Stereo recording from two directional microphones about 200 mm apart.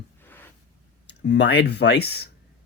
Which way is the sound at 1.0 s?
60° left (ahead or behind).